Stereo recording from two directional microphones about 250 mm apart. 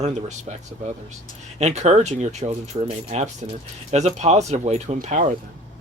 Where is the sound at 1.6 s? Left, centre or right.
Right.